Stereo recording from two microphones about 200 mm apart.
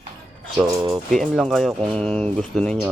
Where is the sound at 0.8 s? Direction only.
20° right (ahead or behind).